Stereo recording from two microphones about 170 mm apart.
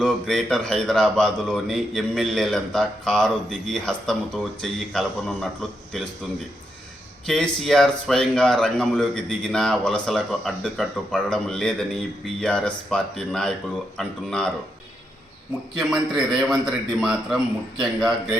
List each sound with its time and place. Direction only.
0.0 s speech: centre (ahead or behind)
7.3 s speech: 5° left (ahead or behind)
15.8 s speech: 5° right (ahead or behind)